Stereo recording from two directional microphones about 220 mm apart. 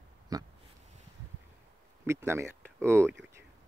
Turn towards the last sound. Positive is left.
turn(degrees=-10)  # may be behind; listen again after turning